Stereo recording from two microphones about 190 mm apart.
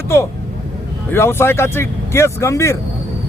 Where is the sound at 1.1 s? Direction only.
10° left (ahead or behind).